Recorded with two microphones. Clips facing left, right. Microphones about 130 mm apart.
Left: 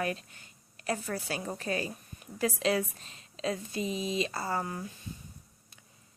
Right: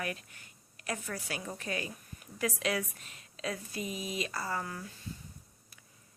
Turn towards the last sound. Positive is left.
turn(degrees=25)  # may be behind; listen again after turning